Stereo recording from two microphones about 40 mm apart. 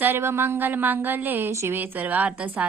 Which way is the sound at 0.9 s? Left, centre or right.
Right.